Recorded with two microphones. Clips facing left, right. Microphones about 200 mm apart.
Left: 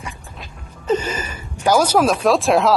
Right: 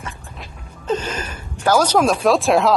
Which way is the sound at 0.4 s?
10° left (ahead or behind).